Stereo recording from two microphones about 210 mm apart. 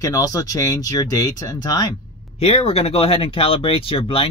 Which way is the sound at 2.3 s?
30° left (ahead or behind).